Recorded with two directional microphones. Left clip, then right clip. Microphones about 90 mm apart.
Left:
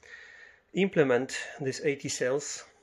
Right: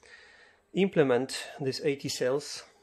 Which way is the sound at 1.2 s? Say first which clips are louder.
Even; 35° right (ahead or behind).